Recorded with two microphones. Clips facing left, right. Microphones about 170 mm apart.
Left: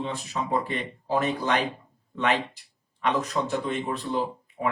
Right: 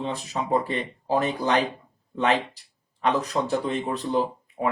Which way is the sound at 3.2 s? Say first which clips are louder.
Right 2 dB; 35° right (ahead or behind).